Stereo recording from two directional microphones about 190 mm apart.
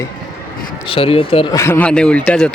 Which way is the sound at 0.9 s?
30° left (ahead or behind).